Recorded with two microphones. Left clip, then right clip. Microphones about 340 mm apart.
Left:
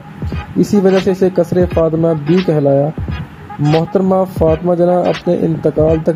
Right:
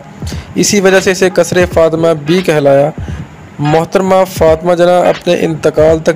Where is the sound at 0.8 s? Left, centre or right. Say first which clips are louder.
Right 5 dB; right.